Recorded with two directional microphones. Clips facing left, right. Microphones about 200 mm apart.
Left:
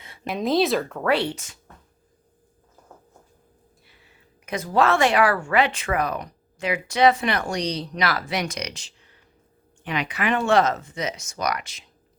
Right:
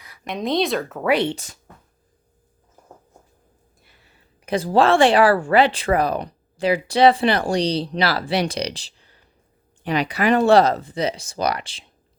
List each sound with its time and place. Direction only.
0.3 s speech: centre (ahead or behind)
1.1 s speech: 20° right (ahead or behind)
4.4 s speech: 30° right (ahead or behind)